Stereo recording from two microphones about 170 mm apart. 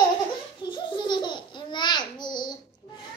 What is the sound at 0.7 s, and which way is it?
Babbling, 25° left (ahead or behind).